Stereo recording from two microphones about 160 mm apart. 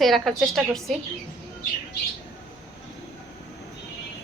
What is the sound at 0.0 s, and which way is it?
Speech, centre (ahead or behind).